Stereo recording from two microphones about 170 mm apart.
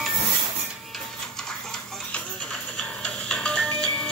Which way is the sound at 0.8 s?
Centre (ahead or behind).